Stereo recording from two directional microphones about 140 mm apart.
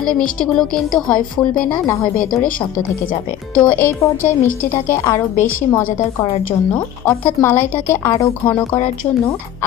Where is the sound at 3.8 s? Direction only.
15° left (ahead or behind).